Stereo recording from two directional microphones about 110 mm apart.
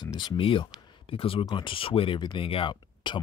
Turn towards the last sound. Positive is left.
turn(degrees=45)  # may be behind; listen again after turning